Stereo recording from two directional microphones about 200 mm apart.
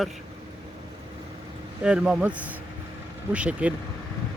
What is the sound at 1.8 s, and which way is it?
Speech, 5° right (ahead or behind).